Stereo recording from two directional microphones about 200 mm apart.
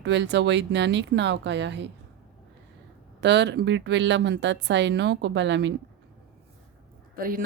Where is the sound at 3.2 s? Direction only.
60° right (ahead or behind).